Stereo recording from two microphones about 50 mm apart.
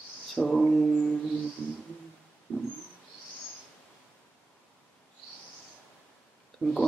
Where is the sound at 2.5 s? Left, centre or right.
Right.